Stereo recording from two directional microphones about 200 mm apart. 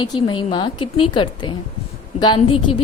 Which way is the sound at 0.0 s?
25° left (ahead or behind).